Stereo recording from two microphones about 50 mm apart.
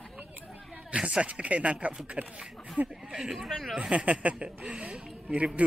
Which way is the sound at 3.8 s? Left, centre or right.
Right.